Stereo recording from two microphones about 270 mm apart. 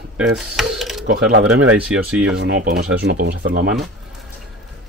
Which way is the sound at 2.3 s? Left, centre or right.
Right.